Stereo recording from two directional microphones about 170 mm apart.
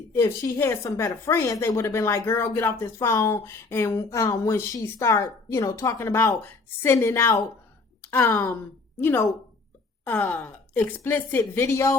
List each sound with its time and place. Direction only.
0.1 s speech: 15° left (ahead or behind)